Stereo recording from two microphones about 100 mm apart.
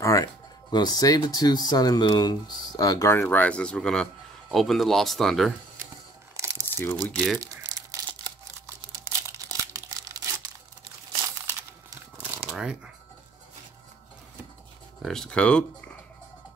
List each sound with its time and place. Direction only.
0.0 s speech: 35° left (ahead or behind)
3.2 s a man's voice: 15° left (ahead or behind)
6.3 s crumpling: 30° right (ahead or behind)
7.0 s speech: 10° left (ahead or behind)
7.3 s crumpling: 35° right (ahead or behind)
9.3 s crumpling: 35° right (ahead or behind)
12.2 s shuffling cards: 25° right (ahead or behind)
12.5 s speech: 10° right (ahead or behind)
15.0 s speech: 5° left (ahead or behind)